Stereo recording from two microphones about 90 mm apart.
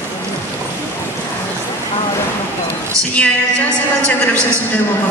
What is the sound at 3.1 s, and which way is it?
A woman's voice, 15° left (ahead or behind).